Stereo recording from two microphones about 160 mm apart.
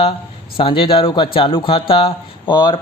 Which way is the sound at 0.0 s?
35° left (ahead or behind).